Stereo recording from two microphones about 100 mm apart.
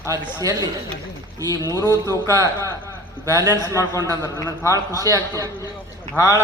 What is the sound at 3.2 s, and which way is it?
Speech, 35° right (ahead or behind).